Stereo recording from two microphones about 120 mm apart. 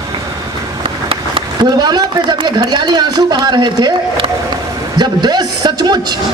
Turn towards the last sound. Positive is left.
turn(degrees=-35)  # may be behind; listen again after turning